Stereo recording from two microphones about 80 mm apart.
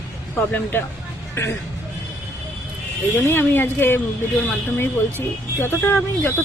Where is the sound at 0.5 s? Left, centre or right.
Left.